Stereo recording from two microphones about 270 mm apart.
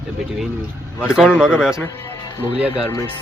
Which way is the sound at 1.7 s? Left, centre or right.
Centre.